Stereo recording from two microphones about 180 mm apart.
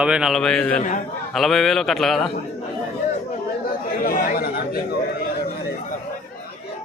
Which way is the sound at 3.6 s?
55° left (ahead or behind).